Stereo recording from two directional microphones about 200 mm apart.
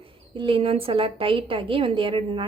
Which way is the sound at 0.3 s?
25° right (ahead or behind).